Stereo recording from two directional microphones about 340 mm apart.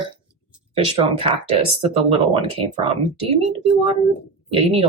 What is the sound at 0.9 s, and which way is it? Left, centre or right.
Speech, centre.